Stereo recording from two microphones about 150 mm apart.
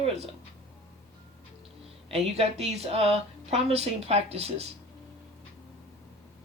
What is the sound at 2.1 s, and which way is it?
Speech, 45° right (ahead or behind).